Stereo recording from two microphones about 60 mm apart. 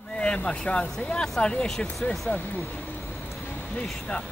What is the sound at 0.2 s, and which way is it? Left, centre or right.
Speech, centre.